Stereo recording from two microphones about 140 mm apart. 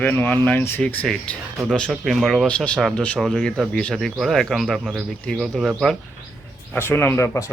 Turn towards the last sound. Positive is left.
turn(degrees=20)  # may be behind; listen again after turning